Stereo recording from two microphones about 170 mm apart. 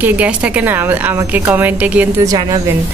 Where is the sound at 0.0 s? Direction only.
10° right (ahead or behind).